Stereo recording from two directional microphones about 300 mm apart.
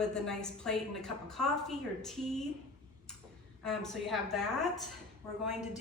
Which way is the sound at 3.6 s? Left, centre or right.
Centre.